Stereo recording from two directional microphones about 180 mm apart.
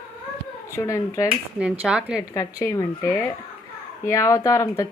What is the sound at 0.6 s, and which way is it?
Speech, 15° left (ahead or behind).